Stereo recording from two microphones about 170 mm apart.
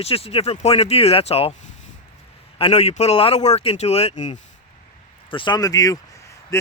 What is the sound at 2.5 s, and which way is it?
Speech, 35° left (ahead or behind).